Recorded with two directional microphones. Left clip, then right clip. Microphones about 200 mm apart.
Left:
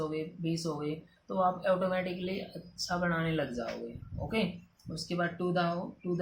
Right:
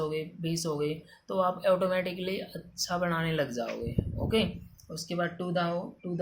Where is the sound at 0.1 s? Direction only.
45° right (ahead or behind).